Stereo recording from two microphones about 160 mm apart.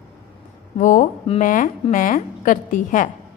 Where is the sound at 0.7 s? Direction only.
55° left (ahead or behind).